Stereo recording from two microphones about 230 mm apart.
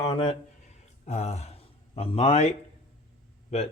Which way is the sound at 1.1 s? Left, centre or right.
Left.